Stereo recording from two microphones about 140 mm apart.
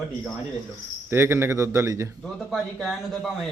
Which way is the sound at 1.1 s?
15° right (ahead or behind).